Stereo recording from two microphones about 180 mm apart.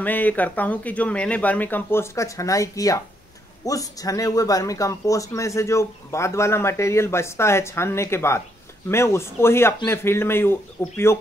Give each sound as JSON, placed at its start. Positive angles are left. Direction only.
{"t": 0.0, "sound": "speech", "side_deg": 10}